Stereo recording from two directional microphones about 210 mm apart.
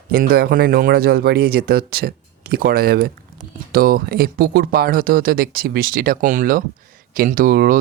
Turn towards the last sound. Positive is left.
turn(degrees=-40)  # may be behind; listen again after turning